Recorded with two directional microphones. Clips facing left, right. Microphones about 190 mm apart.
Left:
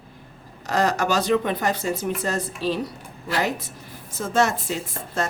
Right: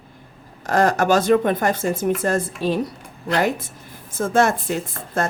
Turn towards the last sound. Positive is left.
turn(degrees=-55)  # may be behind; listen again after turning